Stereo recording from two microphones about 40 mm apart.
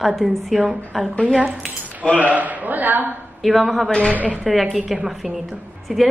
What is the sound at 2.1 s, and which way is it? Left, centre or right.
A man's voice, right.